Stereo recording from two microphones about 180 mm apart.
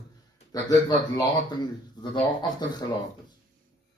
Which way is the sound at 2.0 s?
25° left (ahead or behind).